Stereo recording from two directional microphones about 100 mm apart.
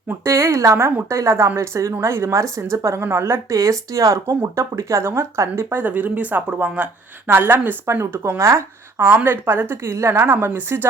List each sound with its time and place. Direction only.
0.3 s a woman's voice: 30° right (ahead or behind)